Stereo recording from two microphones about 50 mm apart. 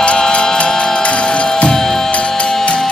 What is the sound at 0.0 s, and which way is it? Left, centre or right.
Music, left.